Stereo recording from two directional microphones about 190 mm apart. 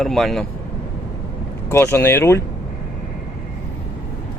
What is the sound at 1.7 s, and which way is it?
Speech, 15° left (ahead or behind).